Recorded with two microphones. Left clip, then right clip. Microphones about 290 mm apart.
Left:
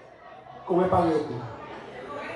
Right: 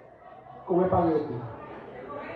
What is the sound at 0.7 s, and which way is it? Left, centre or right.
Speech, centre.